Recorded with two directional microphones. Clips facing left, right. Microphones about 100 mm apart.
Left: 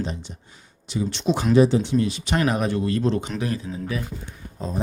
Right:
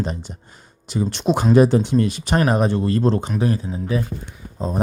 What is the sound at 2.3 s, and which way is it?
Speech, 35° right (ahead or behind).